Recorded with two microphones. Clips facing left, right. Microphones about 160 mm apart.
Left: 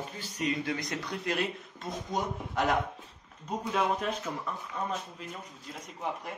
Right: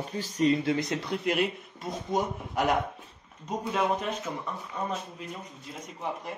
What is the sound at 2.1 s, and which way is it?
Speech, 15° right (ahead or behind).